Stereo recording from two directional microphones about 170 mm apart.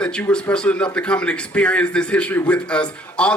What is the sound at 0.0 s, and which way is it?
A man's voice, 5° left (ahead or behind).